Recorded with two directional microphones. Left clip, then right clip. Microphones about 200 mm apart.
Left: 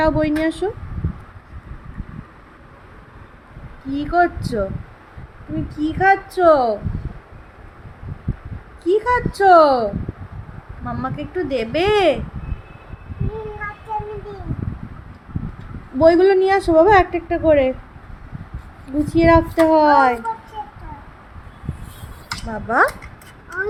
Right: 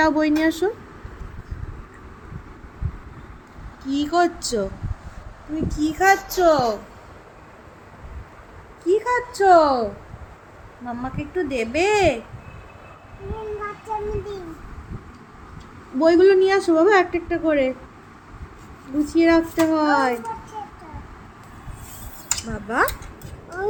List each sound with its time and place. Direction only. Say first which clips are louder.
0.0 s a woman's voice: left 1 dB; 5° left (ahead or behind)
3.8 s speech: left 2 dB; 5° left (ahead or behind)
5.7 s a woman's voice: left 2 dB; 15° left (ahead or behind)
8.8 s speech: left 3 dB; 25° left (ahead or behind)
10.8 s speech: left 4 dB; 25° left (ahead or behind)
16.0 s a woman's voice: left 2 dB; 15° left (ahead or behind)
19.0 s speech: left 4 dB; 20° left (ahead or behind)
22.4 s speech: left 6 dB; 30° left (ahead or behind)